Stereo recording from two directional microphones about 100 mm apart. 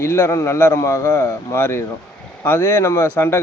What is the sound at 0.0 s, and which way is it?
A man's voice, 25° left (ahead or behind).